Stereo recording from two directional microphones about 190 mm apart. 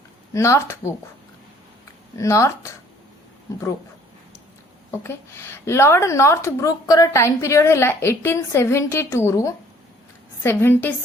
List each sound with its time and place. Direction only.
0.3 s speech: 15° left (ahead or behind)
2.1 s speech: 15° left (ahead or behind)
4.9 s speech: 15° left (ahead or behind)